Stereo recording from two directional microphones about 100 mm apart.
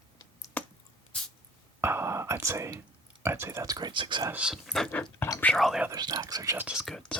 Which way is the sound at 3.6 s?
40° right (ahead or behind).